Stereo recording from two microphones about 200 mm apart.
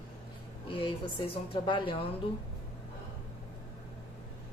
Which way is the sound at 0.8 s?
30° left (ahead or behind).